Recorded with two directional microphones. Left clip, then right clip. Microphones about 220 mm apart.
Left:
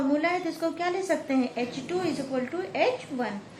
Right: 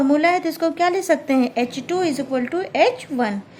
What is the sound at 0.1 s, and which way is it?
A woman's voice, 50° right (ahead or behind).